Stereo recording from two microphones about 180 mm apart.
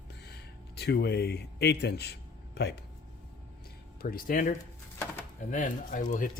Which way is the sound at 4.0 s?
50° left (ahead or behind).